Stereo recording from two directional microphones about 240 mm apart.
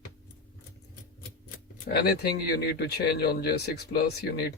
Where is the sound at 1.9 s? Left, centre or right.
Left.